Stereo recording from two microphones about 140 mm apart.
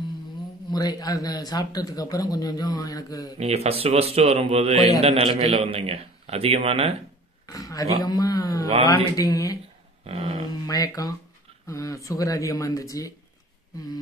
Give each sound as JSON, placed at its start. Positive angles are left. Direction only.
{"t": 0.7, "sound": "speech", "side_deg": 30}
{"t": 3.3, "sound": "a man's voice", "side_deg": -50}
{"t": 7.4, "sound": "speech", "side_deg": 25}
{"t": 10.0, "sound": "a sound", "side_deg": -40}
{"t": 10.5, "sound": "speech", "side_deg": 25}